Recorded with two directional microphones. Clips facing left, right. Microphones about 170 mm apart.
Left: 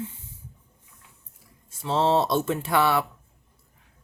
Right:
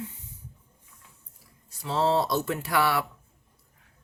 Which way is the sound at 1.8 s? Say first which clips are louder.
Left 3 dB; 25° left (ahead or behind).